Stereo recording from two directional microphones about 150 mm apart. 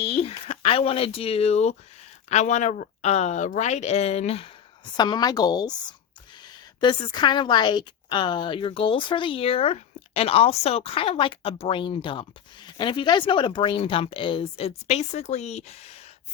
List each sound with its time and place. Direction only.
0.0 s speech: 40° left (ahead or behind)
4.9 s a woman's voice: 30° left (ahead or behind); by 16.0 s 45° left (ahead or behind)